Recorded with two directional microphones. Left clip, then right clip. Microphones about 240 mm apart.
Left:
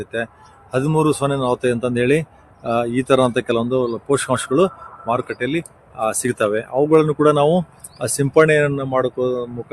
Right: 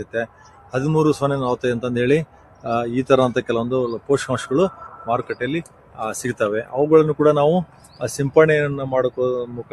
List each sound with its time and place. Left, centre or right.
0.0 s speech: left